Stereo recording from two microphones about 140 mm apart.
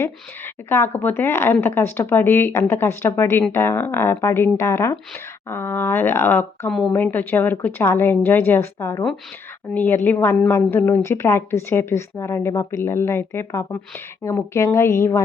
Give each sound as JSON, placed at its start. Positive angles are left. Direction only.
{"t": 0.0, "sound": "a woman's voice", "side_deg": 20}